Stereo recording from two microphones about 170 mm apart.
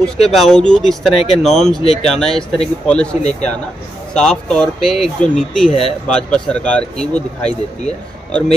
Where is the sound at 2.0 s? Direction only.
Centre (ahead or behind).